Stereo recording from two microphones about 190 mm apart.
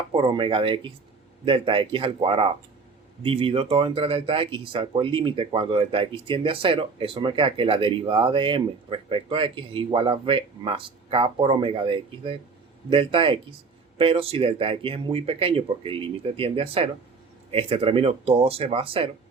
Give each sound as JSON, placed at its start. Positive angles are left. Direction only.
{"t": 0.1, "sound": "speech", "side_deg": -25}